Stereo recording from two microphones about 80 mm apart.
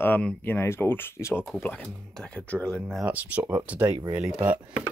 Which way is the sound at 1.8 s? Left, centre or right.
Centre.